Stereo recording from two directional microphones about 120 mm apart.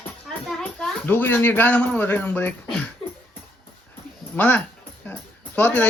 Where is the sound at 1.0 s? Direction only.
15° left (ahead or behind).